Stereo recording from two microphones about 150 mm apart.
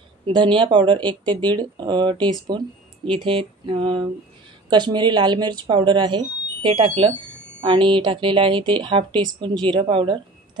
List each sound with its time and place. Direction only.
0.3 s speech: 35° right (ahead or behind)